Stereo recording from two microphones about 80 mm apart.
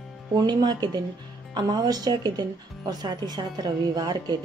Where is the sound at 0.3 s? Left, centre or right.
Right.